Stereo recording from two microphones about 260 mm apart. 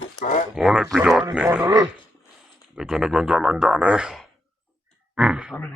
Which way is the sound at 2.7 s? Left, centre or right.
Centre.